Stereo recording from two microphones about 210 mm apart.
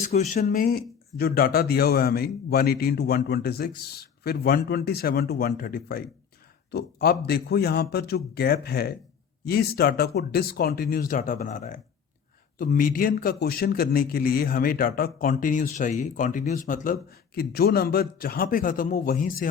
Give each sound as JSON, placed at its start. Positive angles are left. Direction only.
{"t": 0.1, "sound": "a man's voice", "side_deg": 35}